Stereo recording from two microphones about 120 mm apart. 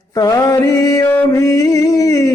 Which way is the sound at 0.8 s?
25° left (ahead or behind).